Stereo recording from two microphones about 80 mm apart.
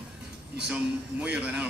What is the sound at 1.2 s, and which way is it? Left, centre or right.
Speech, centre.